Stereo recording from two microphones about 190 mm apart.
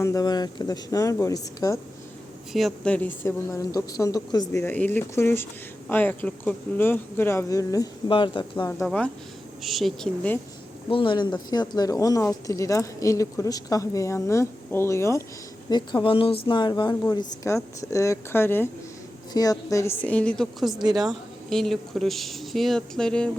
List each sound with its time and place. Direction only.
0.0 s a woman's voice: 20° left (ahead or behind)
2.5 s speech: centre (ahead or behind); by 8.7 s 25° left (ahead or behind)
8.8 s speech: 5° left (ahead or behind)
10.8 s a woman's voice: 25° left (ahead or behind); by 20.8 s centre (ahead or behind)
20.8 s a woman's voice: 20° right (ahead or behind)
21.1 s speech: centre (ahead or behind)